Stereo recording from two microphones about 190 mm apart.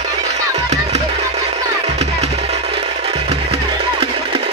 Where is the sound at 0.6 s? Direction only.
35° right (ahead or behind).